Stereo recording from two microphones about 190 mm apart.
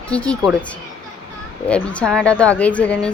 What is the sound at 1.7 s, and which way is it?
Speech, 5° left (ahead or behind).